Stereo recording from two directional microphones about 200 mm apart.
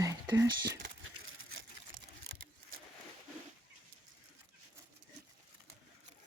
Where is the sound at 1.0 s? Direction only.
90° right.